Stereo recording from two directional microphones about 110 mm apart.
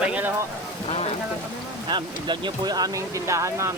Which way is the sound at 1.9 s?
45° right (ahead or behind).